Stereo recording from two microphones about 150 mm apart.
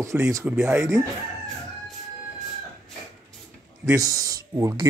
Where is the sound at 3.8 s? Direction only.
25° right (ahead or behind).